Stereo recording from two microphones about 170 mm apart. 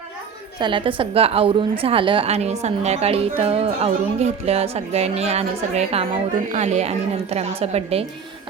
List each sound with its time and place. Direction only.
0.6 s a woman's voice: 30° right (ahead or behind)